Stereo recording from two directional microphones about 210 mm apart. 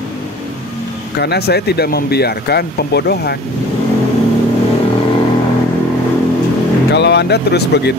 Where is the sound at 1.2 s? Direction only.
50° left (ahead or behind).